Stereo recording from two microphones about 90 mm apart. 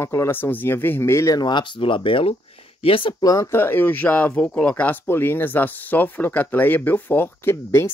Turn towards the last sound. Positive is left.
turn(degrees=25)  # may be behind; listen again after turning